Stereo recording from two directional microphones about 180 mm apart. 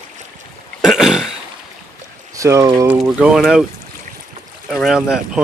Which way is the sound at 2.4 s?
15° right (ahead or behind).